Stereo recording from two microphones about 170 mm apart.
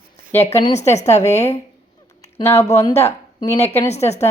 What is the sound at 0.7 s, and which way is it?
Speech, 40° left (ahead or behind).